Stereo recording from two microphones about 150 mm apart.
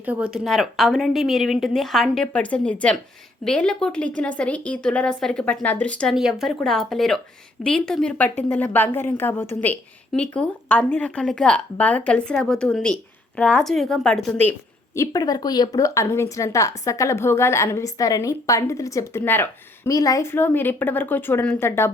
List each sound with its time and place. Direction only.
0.0 s a woman's voice: 10° right (ahead or behind); by 14.5 s 5° left (ahead or behind)
14.9 s a woman's voice: 20° left (ahead or behind)